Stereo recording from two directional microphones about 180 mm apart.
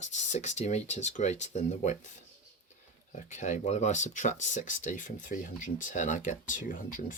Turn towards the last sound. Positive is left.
turn(degrees=50)  # may be behind; listen again after turning